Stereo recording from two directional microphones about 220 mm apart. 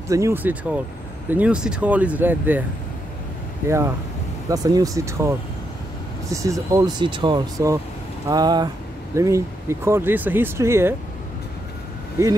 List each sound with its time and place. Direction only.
0.1 s speech: 10° right (ahead or behind)
3.6 s speech: 10° right (ahead or behind)
6.3 s speech: 15° right (ahead or behind)